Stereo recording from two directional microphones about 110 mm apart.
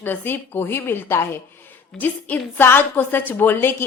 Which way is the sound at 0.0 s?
20° left (ahead or behind).